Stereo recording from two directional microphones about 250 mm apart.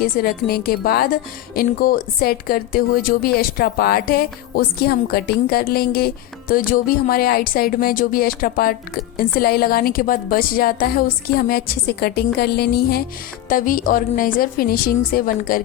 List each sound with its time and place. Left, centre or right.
0.0 s a woman's voice: left